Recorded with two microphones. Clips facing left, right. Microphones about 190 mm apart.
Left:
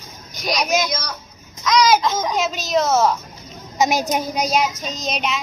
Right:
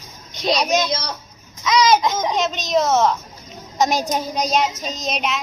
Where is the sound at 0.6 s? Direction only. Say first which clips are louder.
Right 1 dB; 5° left (ahead or behind).